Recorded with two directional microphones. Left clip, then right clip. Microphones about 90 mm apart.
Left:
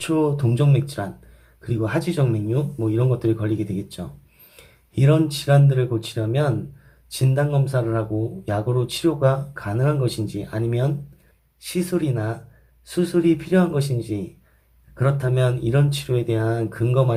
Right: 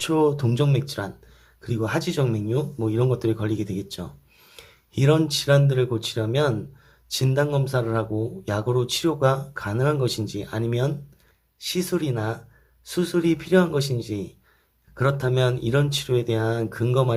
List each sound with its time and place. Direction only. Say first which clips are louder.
0.0 s speech: even; 40° right (ahead or behind)
12.8 s speech: left 3 dB; 45° right (ahead or behind); by 14.3 s 30° right (ahead or behind)
14.9 s speech: even; 40° right (ahead or behind)